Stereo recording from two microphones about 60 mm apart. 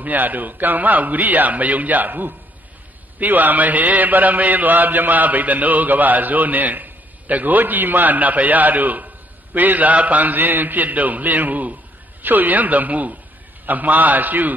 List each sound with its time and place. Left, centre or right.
0.0 s mantra: right